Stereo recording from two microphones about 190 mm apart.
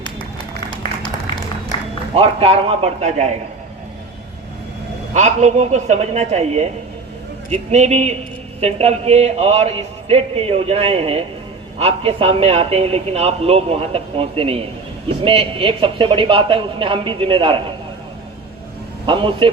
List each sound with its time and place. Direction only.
2.1 s a man's voice: 30° right (ahead or behind)
5.1 s a man's voice: 35° right (ahead or behind)
19.0 s speech: 25° right (ahead or behind)